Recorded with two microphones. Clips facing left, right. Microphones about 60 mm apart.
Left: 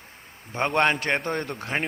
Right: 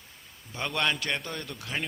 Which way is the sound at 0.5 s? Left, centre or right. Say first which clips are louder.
Left 7 dB; left.